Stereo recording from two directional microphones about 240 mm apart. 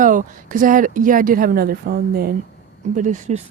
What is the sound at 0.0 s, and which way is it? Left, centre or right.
Speech, right.